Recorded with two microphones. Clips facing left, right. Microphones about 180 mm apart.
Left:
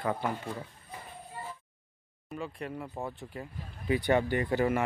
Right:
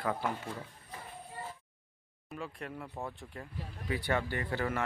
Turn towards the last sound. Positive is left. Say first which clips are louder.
# left 7 dB
turn(degrees=15)  # may be behind; listen again after turning